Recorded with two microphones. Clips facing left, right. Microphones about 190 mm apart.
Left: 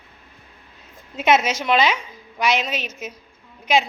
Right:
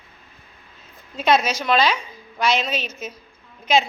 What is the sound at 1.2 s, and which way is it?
A woman's voice, 20° left (ahead or behind).